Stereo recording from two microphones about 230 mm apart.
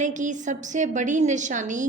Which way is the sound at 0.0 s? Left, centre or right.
Right.